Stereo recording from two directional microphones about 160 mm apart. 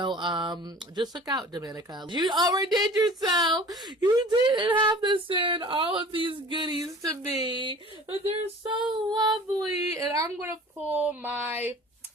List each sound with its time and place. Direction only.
0.0 s speech: 30° right (ahead or behind); by 11.7 s 10° right (ahead or behind)